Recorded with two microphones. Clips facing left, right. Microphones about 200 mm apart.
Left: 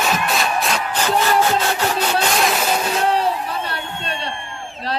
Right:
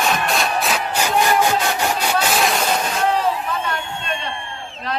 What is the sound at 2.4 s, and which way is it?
Music, centre (ahead or behind).